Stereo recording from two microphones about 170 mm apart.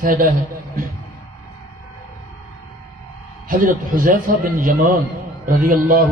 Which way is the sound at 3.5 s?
55° right (ahead or behind).